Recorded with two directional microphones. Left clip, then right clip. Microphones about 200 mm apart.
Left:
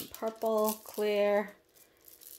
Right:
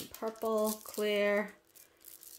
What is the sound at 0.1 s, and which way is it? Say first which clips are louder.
Speech: left 3 dB; 5° left (ahead or behind).